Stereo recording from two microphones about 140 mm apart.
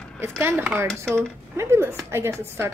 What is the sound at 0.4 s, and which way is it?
A woman's voice, 15° right (ahead or behind).